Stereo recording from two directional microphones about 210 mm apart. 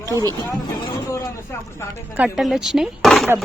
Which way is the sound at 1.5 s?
10° left (ahead or behind).